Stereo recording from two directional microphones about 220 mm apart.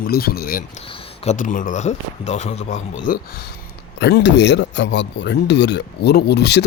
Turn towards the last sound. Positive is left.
turn(degrees=50)  # may be behind; listen again after turning